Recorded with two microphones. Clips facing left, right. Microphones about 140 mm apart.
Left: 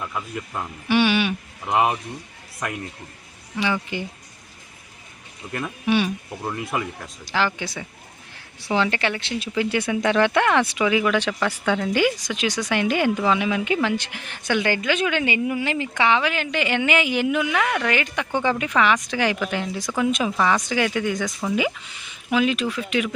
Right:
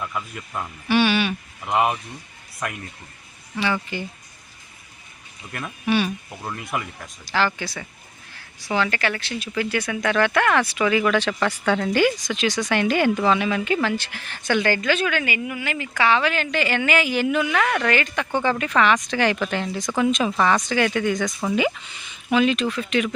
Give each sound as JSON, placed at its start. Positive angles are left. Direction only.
{"t": 0.0, "sound": "a woman's voice", "side_deg": 15}
{"t": 3.6, "sound": "a woman's voice", "side_deg": 15}
{"t": 5.6, "sound": "a woman's voice", "side_deg": 15}